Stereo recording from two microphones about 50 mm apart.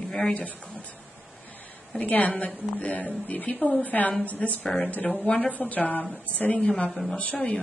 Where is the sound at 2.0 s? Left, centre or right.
Left.